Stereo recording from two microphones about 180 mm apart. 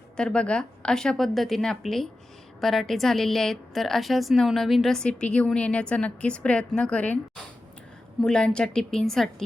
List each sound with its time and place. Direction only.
0.2 s a woman's voice: 5° left (ahead or behind)